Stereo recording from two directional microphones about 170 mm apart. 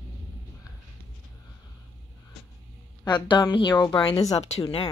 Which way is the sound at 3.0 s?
25° left (ahead or behind).